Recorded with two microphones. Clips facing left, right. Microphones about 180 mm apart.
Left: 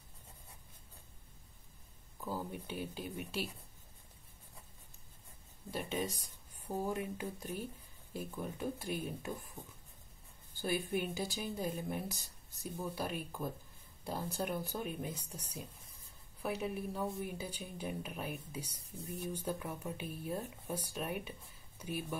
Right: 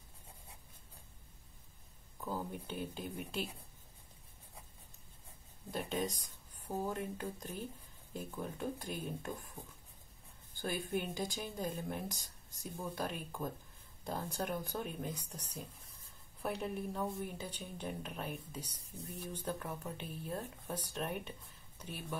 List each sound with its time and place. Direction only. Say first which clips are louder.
2.1 s speech: even; 5° left (ahead or behind)
5.7 s a woman's voice: even; 5° left (ahead or behind)
10.6 s a woman's voice: left 2 dB; 5° left (ahead or behind)